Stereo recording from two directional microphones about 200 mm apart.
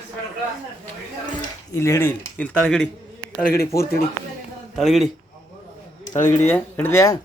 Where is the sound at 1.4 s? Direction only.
15° left (ahead or behind).